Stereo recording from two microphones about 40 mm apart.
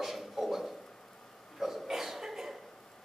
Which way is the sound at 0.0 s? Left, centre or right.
Centre.